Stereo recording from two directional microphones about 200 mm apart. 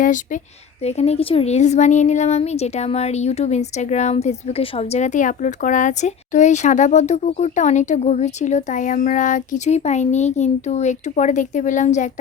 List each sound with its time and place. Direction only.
0.9 s a woman's voice: 30° left (ahead or behind)